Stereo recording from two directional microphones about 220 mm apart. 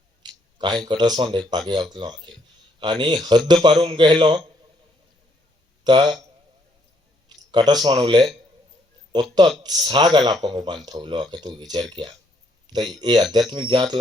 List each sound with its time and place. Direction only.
0.2 s speech: 20° right (ahead or behind)
5.8 s speech: 20° right (ahead or behind)
7.3 s speech: 20° right (ahead or behind)